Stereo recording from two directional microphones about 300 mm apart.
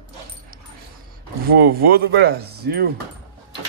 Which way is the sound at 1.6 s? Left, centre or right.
Right.